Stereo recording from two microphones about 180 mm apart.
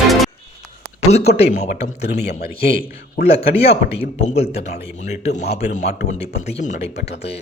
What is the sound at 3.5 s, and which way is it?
Speech, 35° left (ahead or behind).